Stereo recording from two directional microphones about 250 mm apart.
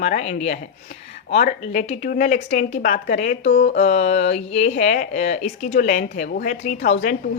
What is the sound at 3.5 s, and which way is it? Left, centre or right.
Mantra, left.